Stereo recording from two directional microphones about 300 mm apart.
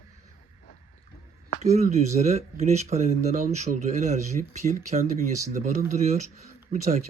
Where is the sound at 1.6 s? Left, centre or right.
Right.